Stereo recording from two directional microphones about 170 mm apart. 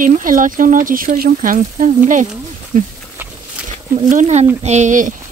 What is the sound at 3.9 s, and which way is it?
Speech, 45° right (ahead or behind).